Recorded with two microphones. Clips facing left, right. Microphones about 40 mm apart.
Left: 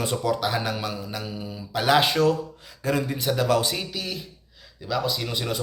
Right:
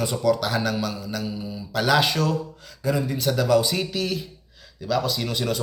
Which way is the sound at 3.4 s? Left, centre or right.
Left.